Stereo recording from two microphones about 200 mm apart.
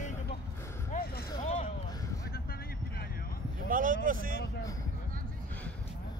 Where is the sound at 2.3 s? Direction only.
50° left (ahead or behind).